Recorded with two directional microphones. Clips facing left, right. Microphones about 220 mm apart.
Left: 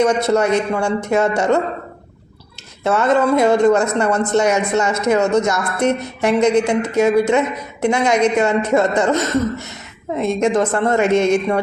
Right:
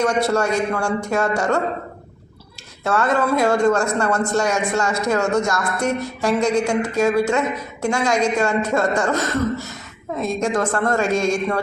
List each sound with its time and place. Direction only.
0.0 s a man's voice: 20° left (ahead or behind)
2.8 s a man's voice: 20° left (ahead or behind)